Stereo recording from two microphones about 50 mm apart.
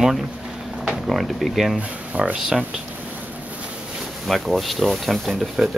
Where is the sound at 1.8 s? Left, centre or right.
Right.